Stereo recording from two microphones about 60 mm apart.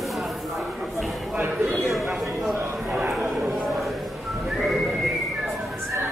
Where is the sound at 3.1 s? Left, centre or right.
Centre.